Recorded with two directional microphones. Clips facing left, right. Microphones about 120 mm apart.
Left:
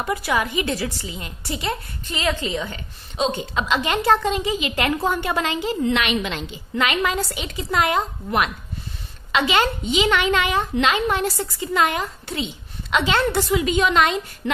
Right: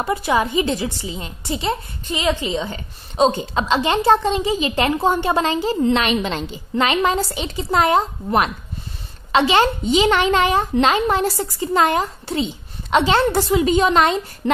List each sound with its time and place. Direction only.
0.0 s a woman's voice: 25° right (ahead or behind)
3.2 s a woman's voice: 35° right (ahead or behind)